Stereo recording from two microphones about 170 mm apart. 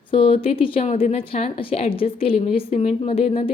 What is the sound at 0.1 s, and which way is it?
Speech, 35° left (ahead or behind).